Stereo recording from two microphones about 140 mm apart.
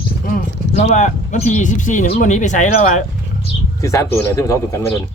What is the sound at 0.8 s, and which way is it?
Speech, 55° left (ahead or behind).